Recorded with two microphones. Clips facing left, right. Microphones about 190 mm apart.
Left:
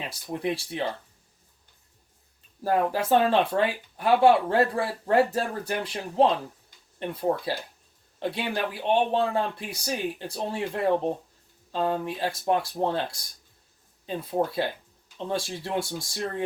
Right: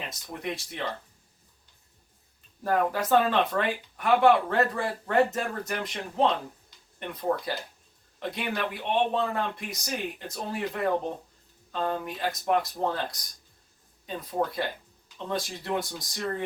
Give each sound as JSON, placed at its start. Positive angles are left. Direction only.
{"t": 0.1, "sound": "speech", "side_deg": 30}
{"t": 2.6, "sound": "speech", "side_deg": 30}